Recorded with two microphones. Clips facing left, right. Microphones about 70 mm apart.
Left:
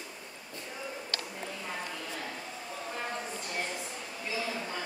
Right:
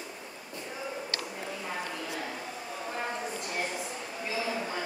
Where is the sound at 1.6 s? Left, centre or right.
Centre.